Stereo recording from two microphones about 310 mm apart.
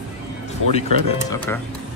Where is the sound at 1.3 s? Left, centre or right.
Centre.